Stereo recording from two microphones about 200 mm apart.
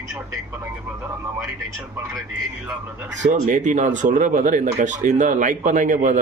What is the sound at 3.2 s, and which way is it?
Speech, 35° right (ahead or behind).